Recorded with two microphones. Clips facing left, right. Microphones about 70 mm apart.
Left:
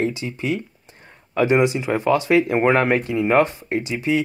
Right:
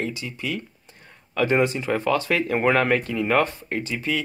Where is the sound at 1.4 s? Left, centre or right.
Centre.